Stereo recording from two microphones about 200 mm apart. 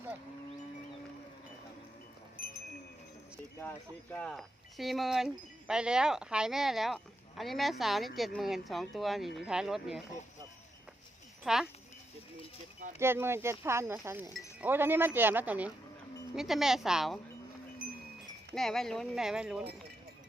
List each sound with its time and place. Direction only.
3.3 s speech: 10° left (ahead or behind)
11.4 s speech: centre (ahead or behind)
13.0 s speech: 10° right (ahead or behind)
17.8 s music: 45° right (ahead or behind)
18.5 s speech: centre (ahead or behind)